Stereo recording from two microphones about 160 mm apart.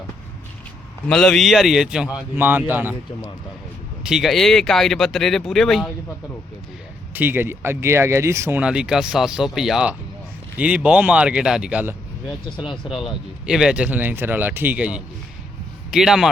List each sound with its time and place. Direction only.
1.0 s speech: 5° left (ahead or behind)
7.1 s speech: 10° right (ahead or behind)
12.5 s speech: 30° left (ahead or behind)
13.0 s speech: 5° right (ahead or behind)